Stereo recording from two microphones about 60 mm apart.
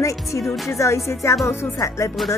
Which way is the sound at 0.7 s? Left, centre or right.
Left.